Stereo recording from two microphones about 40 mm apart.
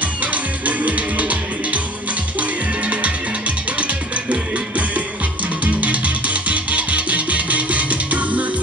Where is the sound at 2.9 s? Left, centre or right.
Right.